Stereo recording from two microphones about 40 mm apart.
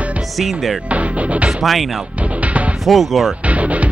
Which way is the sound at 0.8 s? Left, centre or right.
Right.